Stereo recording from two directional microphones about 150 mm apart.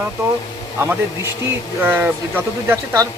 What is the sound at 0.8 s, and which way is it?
Speech, 20° right (ahead or behind).